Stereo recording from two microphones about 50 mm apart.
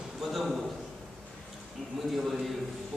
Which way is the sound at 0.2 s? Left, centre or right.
Centre.